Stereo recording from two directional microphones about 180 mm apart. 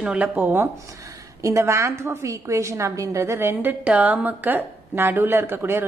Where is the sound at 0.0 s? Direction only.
5° right (ahead or behind).